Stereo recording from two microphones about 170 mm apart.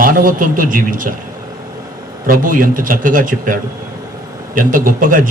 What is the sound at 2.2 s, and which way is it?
A man's voice, 55° right (ahead or behind).